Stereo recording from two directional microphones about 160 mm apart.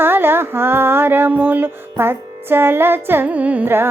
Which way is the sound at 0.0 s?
15° right (ahead or behind).